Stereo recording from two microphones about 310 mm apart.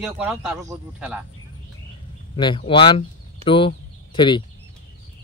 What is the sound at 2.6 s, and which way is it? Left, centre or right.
Speech, centre.